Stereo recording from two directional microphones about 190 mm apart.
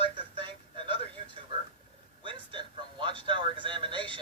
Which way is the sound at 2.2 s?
25° right (ahead or behind).